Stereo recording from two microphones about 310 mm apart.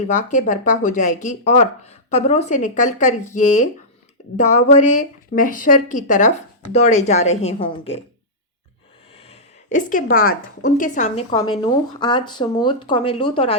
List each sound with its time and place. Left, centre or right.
0.1 s speech: left
9.1 s speech: centre